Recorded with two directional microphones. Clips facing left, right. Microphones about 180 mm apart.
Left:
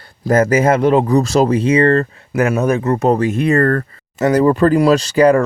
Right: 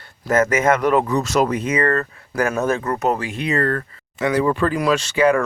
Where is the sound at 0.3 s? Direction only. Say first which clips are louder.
Left 4 dB; 35° left (ahead or behind).